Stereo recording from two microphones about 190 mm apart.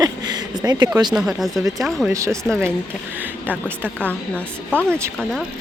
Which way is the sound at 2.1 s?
15° right (ahead or behind).